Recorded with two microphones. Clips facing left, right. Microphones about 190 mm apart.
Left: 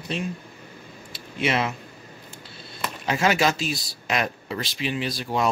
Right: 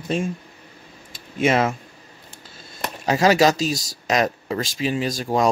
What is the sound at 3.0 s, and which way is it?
Speech, 35° right (ahead or behind).